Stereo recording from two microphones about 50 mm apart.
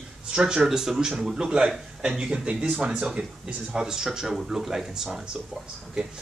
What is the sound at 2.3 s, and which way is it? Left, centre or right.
A man's voice, right.